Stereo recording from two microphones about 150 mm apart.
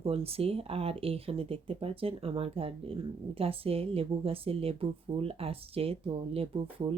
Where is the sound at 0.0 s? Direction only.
40° right (ahead or behind).